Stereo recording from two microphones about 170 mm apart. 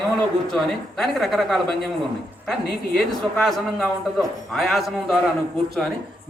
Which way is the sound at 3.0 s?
Centre (ahead or behind).